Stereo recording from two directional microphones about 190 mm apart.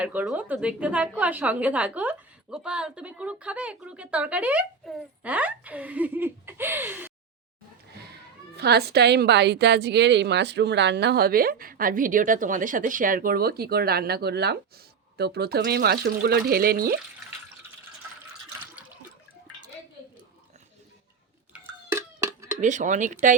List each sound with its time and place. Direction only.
0.0 s a woman's voice: 10° right (ahead or behind)
8.5 s a woman's voice: 60° right (ahead or behind)
21.5 s cowbell: 10° right (ahead or behind)
22.6 s speech: 40° right (ahead or behind)